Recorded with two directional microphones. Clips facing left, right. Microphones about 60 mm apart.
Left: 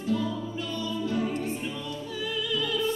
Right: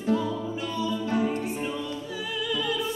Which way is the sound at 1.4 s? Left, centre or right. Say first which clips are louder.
Right 2 dB; centre.